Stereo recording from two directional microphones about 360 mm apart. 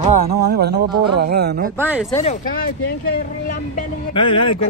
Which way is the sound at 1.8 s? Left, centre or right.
Centre.